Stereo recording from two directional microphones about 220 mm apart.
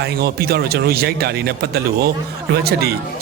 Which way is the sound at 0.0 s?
45° right (ahead or behind).